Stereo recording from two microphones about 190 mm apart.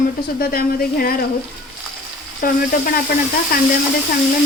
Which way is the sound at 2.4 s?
50° left (ahead or behind).